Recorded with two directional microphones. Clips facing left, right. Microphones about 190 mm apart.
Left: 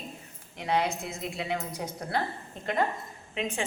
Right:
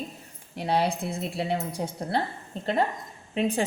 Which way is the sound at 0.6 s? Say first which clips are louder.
Right 3 dB; 35° right (ahead or behind).